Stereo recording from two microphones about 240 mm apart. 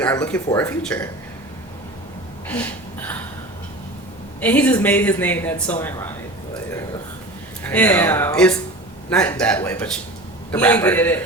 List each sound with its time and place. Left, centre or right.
0.0 s a woman's voice: centre
2.5 s gasp: centre
4.4 s a woman's voice: centre
7.6 s a woman's voice: centre